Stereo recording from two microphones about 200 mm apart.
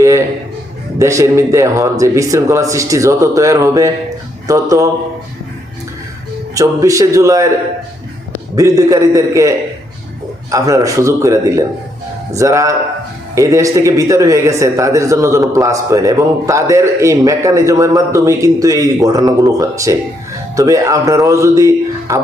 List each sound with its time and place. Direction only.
0.0 s a sound: 15° right (ahead or behind)
0.9 s a man's voice: 15° right (ahead or behind)
6.5 s a man's voice: 15° right (ahead or behind)
8.5 s a man's voice: 15° right (ahead or behind)